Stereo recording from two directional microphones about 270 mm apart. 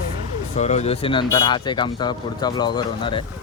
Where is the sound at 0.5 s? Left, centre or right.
Left.